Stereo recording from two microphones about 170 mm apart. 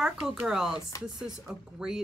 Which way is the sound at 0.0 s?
5° right (ahead or behind).